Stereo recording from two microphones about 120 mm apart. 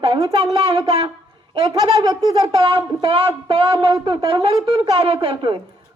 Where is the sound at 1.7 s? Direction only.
35° right (ahead or behind).